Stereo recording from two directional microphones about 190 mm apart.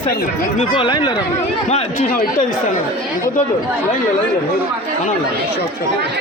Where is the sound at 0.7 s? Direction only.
25° left (ahead or behind).